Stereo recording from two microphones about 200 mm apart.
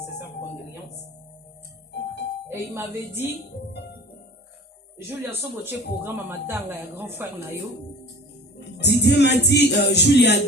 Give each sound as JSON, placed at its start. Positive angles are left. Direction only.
{"t": 2.5, "sound": "speech", "side_deg": -10}
{"t": 4.9, "sound": "speech", "side_deg": -10}
{"t": 8.5, "sound": "music", "side_deg": 55}